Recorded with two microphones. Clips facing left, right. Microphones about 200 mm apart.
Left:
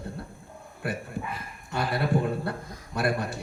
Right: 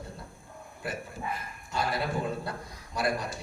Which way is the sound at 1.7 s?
60° left (ahead or behind).